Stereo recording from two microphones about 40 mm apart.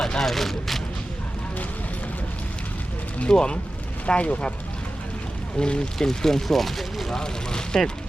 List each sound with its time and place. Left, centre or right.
0.2 s speech: centre
3.3 s speech: left
5.5 s speech: left
6.0 s speech: centre
7.1 s speech: centre